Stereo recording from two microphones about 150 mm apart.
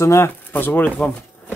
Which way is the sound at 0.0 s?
20° left (ahead or behind).